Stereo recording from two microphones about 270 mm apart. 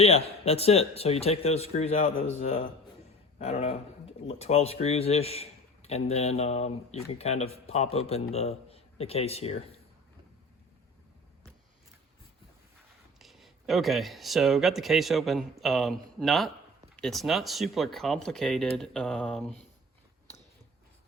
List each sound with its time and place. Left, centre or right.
0.0 s speech: left
13.1 s speech: centre